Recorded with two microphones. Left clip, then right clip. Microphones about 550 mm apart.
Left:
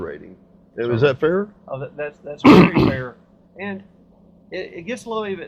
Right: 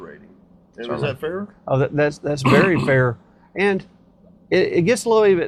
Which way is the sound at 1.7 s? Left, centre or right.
Right.